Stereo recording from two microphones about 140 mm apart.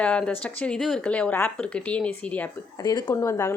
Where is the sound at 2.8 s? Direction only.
30° left (ahead or behind).